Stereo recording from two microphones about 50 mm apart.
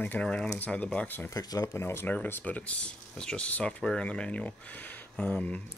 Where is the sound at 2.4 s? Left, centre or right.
Left.